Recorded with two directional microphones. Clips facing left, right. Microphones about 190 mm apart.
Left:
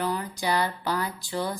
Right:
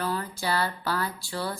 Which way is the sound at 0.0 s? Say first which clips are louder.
Left 1 dB; 15° left (ahead or behind).